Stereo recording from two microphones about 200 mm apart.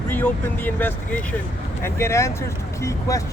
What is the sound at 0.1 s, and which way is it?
Speech, 10° left (ahead or behind).